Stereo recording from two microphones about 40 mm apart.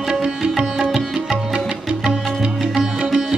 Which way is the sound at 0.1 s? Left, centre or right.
Right.